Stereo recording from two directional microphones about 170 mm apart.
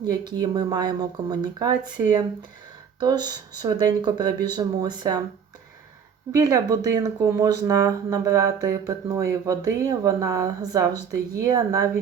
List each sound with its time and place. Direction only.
0.0 s speech: 25° right (ahead or behind)
6.3 s speech: 20° right (ahead or behind)